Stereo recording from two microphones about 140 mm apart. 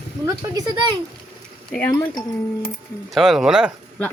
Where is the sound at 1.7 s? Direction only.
10° left (ahead or behind).